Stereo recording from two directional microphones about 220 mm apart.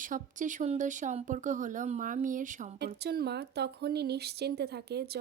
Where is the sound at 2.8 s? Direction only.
50° right (ahead or behind).